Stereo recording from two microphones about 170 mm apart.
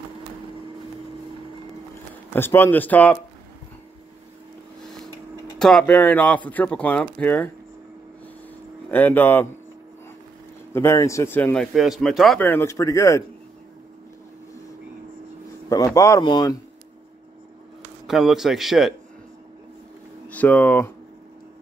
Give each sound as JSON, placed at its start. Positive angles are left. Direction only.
{"t": 2.3, "sound": "speech", "side_deg": 15}
{"t": 5.6, "sound": "speech", "side_deg": 5}
{"t": 8.9, "sound": "speech", "side_deg": 10}
{"t": 10.7, "sound": "speech", "side_deg": 15}
{"t": 12.4, "sound": "speech", "side_deg": 10}
{"t": 15.7, "sound": "speech", "side_deg": 20}
{"t": 18.0, "sound": "a man's voice", "side_deg": 0}
{"t": 20.2, "sound": "speech", "side_deg": 10}